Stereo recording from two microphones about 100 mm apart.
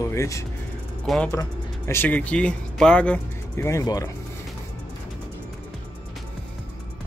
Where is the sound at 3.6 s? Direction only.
30° left (ahead or behind).